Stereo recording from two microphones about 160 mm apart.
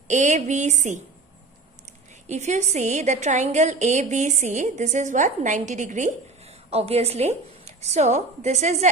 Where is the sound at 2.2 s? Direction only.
45° right (ahead or behind).